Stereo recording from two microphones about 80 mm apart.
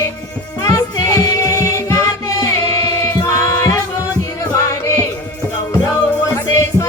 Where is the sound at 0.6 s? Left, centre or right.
Left.